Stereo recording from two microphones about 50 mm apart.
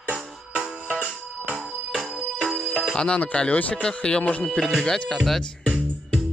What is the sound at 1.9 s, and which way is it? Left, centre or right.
Ringtone, centre.